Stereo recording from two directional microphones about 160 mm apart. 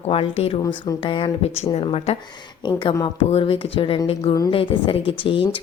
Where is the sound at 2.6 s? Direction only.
30° left (ahead or behind).